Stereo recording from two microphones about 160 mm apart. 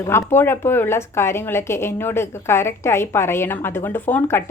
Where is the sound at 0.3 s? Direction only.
15° left (ahead or behind).